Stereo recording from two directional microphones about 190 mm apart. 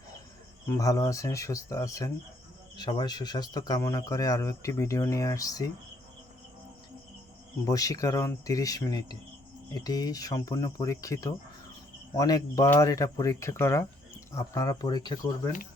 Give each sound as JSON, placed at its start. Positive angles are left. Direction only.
{"t": 0.8, "sound": "a man's voice", "side_deg": 15}
{"t": 7.6, "sound": "a man's voice", "side_deg": 20}